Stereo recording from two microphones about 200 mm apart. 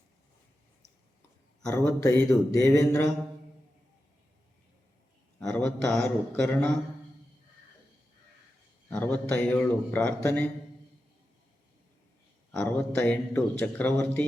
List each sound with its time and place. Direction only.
1.6 s speech: 10° left (ahead or behind)
5.4 s a sound: 5° left (ahead or behind)
5.9 s speech: 5° left (ahead or behind)
8.9 s speech: 5° left (ahead or behind)
12.5 s speech: 10° left (ahead or behind)